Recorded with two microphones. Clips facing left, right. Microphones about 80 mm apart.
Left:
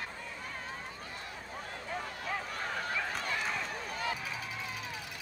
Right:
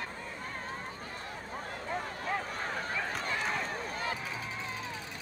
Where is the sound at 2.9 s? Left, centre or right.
Right.